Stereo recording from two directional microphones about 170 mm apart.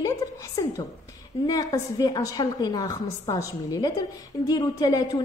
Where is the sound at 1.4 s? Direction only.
20° left (ahead or behind).